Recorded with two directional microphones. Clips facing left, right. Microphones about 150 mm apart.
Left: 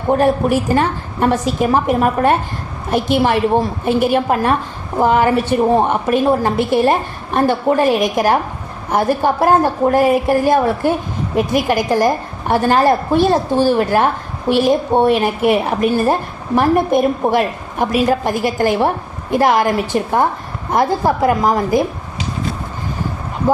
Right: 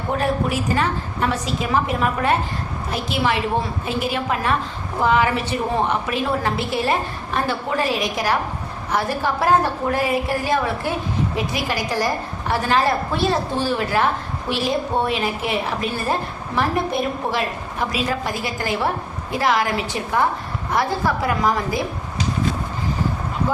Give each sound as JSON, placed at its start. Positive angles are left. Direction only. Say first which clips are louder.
{"t": 0.1, "sound": "a woman's voice", "louder": "left 8 dB", "side_deg": 50}